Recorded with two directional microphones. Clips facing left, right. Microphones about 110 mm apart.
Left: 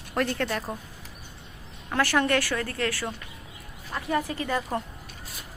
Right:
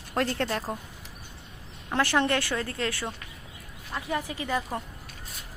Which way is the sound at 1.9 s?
20° right (ahead or behind).